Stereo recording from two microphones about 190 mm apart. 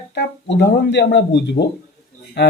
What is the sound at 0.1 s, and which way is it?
Speech, 60° left (ahead or behind).